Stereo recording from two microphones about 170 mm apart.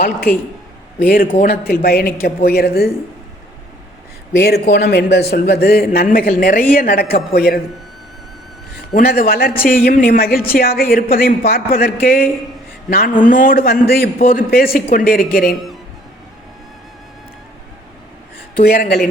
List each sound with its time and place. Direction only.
0.9 s speech: 60° left (ahead or behind)
4.3 s speech: 75° left (ahead or behind)
9.0 s speech: 60° left (ahead or behind)
18.6 s speech: 60° left (ahead or behind)